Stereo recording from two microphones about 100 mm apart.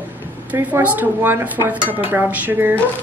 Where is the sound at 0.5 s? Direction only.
15° right (ahead or behind).